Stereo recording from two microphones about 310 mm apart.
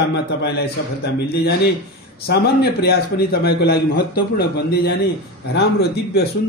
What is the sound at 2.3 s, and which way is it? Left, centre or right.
A man's voice, left.